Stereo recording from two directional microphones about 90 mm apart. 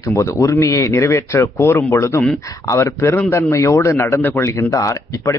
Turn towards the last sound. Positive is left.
turn(degrees=35)  # may be behind; listen again after turning